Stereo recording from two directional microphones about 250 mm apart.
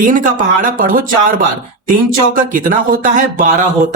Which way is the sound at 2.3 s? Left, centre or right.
Right.